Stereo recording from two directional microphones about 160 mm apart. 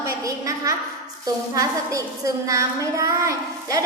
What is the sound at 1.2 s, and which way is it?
A woman's voice, 20° right (ahead or behind).